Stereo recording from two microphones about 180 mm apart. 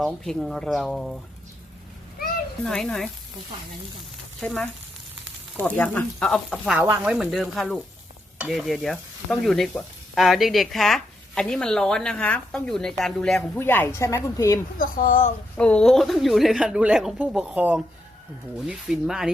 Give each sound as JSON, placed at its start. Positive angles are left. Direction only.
{"t": 0.0, "sound": "speech", "side_deg": 0}
{"t": 2.6, "sound": "speech", "side_deg": 5}
{"t": 4.4, "sound": "speech", "side_deg": 5}
{"t": 6.7, "sound": "speech", "side_deg": -10}
{"t": 14.8, "sound": "a woman's voice", "side_deg": 50}
{"t": 15.5, "sound": "speech", "side_deg": 5}